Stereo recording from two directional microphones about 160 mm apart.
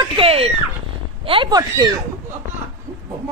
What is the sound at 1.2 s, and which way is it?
Speech, 30° right (ahead or behind).